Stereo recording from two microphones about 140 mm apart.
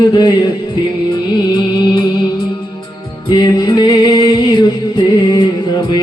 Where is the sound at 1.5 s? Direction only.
30° left (ahead or behind).